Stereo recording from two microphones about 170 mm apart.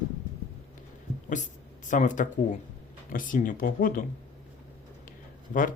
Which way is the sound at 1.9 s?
50° left (ahead or behind).